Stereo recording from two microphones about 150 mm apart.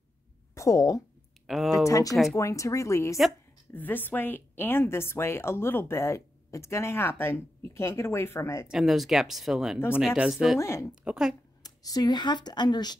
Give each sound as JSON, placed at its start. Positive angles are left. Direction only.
{"t": 0.6, "sound": "speech", "side_deg": 20}
{"t": 1.5, "sound": "speech", "side_deg": 0}
{"t": 1.9, "sound": "a woman's voice", "side_deg": 20}
{"t": 8.6, "sound": "speech", "side_deg": 0}
{"t": 10.6, "sound": "speech", "side_deg": 20}
{"t": 11.1, "sound": "speech", "side_deg": -5}
{"t": 11.6, "sound": "speech", "side_deg": 25}